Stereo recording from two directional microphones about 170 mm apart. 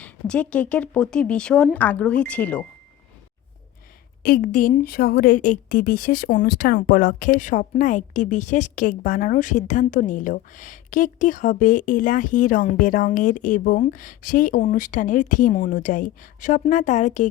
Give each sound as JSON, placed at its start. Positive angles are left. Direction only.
{"t": 0.0, "sound": "speech", "side_deg": 5}
{"t": 4.2, "sound": "speech", "side_deg": 55}